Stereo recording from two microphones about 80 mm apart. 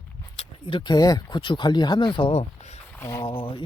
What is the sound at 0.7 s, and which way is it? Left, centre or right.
Speech, left.